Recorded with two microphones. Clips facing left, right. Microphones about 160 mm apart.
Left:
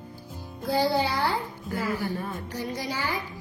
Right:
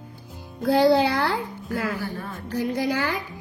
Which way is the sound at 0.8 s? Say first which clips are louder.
Right 8 dB; 70° right (ahead or behind).